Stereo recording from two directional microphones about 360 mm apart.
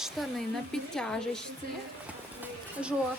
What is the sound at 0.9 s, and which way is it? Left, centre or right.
Speech, centre.